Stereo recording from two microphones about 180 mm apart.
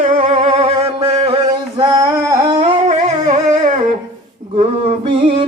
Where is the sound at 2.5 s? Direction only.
40° right (ahead or behind).